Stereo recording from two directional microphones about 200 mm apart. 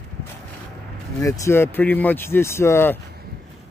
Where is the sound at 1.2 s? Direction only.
15° left (ahead or behind).